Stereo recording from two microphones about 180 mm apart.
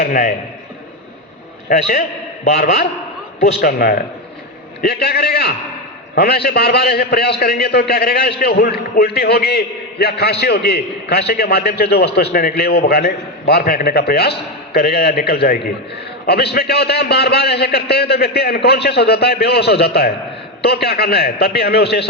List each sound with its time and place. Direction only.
0.0 s a man's voice: 50° left (ahead or behind)
1.9 s a man's voice: 50° left (ahead or behind)
3.6 s a man's voice: 55° left (ahead or behind)